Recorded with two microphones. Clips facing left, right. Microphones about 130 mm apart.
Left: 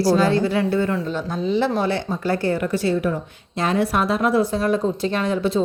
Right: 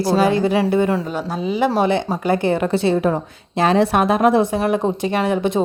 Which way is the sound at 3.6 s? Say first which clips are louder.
Right 5 dB; 80° right.